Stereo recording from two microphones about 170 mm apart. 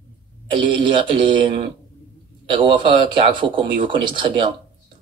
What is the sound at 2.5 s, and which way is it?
Speech, 30° right (ahead or behind).